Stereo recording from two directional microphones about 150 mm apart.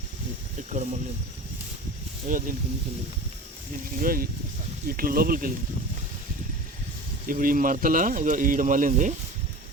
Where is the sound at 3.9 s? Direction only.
70° right (ahead or behind).